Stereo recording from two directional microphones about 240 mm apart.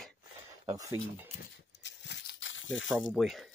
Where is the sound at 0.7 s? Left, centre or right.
Centre.